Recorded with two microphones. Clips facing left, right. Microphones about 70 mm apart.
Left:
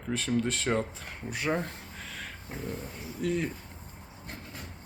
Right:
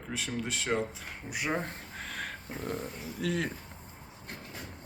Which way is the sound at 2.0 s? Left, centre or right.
Right.